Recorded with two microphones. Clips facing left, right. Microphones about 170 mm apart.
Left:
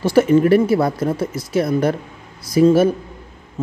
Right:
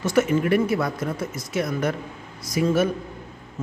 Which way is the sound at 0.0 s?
30° left (ahead or behind).